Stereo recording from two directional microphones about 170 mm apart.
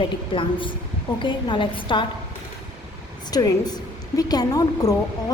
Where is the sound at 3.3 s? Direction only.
20° left (ahead or behind).